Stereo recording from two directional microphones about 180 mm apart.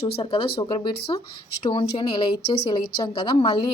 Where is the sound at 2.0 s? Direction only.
25° left (ahead or behind).